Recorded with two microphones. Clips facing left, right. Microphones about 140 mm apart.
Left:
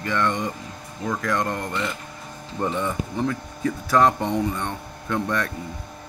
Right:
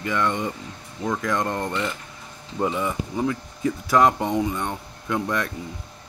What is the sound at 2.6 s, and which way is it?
Speech, 5° right (ahead or behind).